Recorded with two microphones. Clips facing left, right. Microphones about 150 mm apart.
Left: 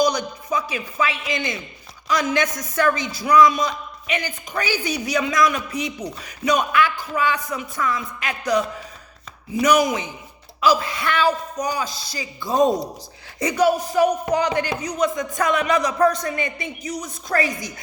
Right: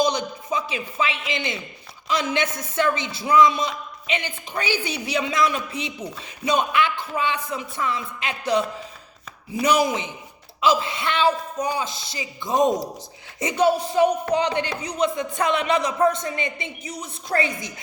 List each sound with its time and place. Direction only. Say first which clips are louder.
0.0 s speech: left 2 dB; 25° right (ahead or behind)